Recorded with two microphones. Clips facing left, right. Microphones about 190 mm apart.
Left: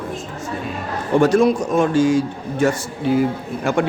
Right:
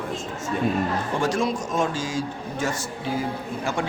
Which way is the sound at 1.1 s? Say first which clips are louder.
Left 12 dB; 60° left (ahead or behind).